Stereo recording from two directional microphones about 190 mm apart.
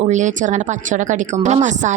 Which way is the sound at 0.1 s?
40° right (ahead or behind).